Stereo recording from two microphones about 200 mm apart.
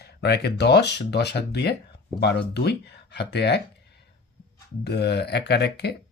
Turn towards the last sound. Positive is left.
turn(degrees=55)  # may be behind; listen again after turning